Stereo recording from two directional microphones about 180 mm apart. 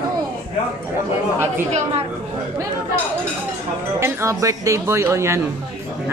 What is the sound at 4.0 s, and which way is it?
Speech, 15° right (ahead or behind).